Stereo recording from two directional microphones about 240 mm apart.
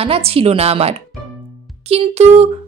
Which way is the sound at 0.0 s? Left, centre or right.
Right.